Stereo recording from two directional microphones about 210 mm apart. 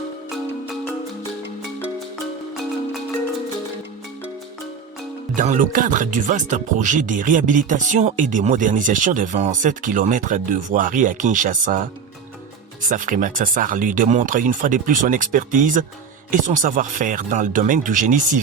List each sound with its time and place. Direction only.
0.3 s music: centre (ahead or behind)
5.3 s speech: 35° right (ahead or behind)
12.9 s speech: 40° right (ahead or behind)